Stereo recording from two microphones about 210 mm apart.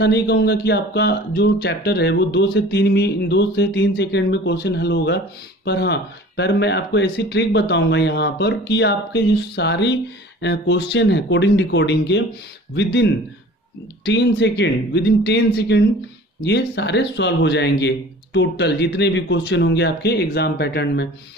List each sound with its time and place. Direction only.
0.0 s speech: 50° left (ahead or behind)